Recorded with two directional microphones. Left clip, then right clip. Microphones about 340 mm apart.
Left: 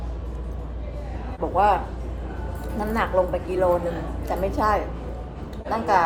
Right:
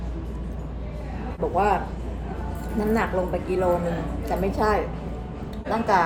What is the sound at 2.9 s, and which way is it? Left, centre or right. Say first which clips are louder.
A woman's voice: left 6 dB; centre.